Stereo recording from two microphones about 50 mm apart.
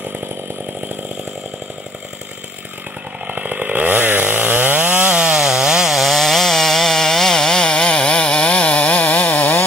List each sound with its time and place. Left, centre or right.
3.3 s chainsaw: right
5.3 s chainsaw: centre; by 9.7 s left